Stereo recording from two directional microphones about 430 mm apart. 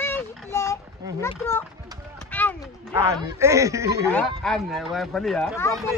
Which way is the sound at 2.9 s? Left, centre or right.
Centre.